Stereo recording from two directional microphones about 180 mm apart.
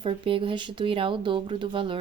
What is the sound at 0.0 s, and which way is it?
Speech, 30° right (ahead or behind).